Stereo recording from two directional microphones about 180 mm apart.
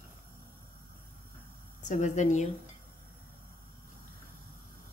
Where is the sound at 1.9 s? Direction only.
40° left (ahead or behind).